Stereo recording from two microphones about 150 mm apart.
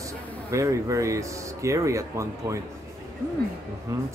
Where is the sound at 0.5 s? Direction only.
20° right (ahead or behind).